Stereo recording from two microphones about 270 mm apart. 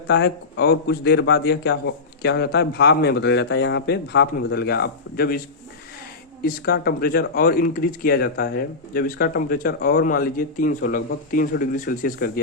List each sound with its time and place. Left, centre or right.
0.1 s speech: left
6.4 s speech: left